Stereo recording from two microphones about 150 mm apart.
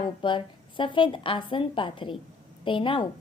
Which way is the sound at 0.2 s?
35° left (ahead or behind).